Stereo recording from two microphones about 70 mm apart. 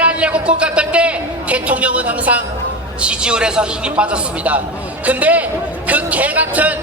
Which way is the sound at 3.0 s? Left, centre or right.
Centre.